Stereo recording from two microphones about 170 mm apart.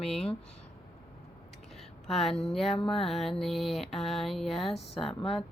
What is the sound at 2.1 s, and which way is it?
Speech, centre (ahead or behind).